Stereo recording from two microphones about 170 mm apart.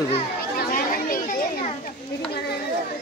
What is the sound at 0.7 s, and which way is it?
Chatter, 55° left (ahead or behind).